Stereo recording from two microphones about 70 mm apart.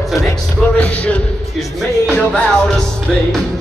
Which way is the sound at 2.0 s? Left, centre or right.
Centre.